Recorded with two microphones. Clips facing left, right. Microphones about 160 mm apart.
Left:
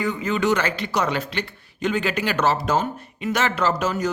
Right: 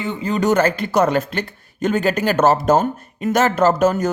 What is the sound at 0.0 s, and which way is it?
A man's voice, 30° right (ahead or behind).